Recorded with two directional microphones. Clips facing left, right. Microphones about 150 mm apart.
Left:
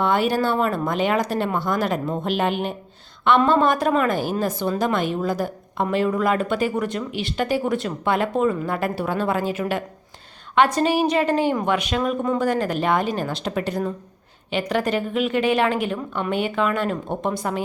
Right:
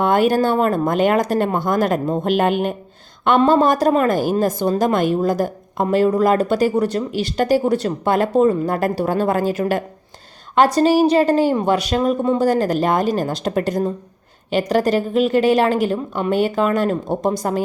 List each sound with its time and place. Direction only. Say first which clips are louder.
0.0 s a woman's voice: right 5 dB; 50° right (ahead or behind)